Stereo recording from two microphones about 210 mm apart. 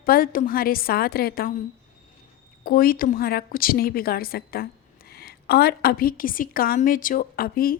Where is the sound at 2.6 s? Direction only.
45° left (ahead or behind).